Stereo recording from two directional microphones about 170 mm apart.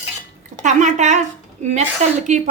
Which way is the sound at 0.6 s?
45° right (ahead or behind).